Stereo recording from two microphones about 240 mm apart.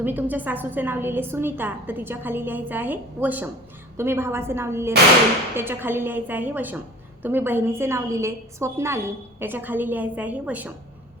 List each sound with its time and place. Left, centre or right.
0.0 s a woman's voice: centre